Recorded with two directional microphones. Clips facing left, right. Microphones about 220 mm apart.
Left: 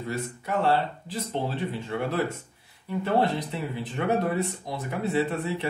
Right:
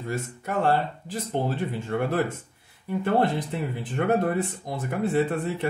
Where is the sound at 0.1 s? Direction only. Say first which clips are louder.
Right 1 dB; 45° right (ahead or behind).